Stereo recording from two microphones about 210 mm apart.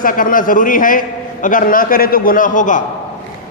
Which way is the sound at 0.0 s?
40° left (ahead or behind).